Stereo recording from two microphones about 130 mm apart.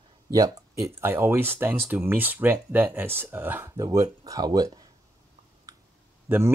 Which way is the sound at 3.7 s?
25° right (ahead or behind).